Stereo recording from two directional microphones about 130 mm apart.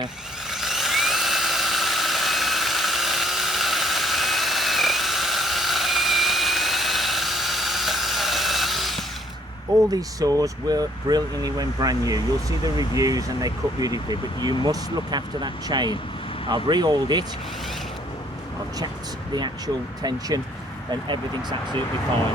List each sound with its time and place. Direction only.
0.5 s a sound: centre (ahead or behind)
9.9 s speech: 25° right (ahead or behind)
19.3 s speech: 30° right (ahead or behind)